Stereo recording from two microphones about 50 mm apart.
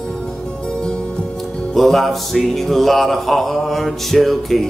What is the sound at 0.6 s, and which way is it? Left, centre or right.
Music, centre.